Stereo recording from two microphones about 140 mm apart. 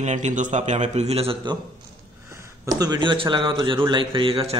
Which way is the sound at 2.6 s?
30° right (ahead or behind).